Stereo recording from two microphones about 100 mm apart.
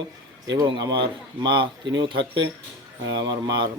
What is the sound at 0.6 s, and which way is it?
Speech, 50° right (ahead or behind).